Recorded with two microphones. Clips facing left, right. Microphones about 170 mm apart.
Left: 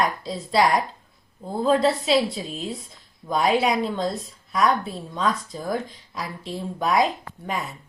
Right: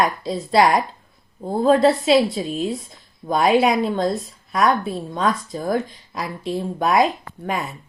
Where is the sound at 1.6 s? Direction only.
55° right (ahead or behind).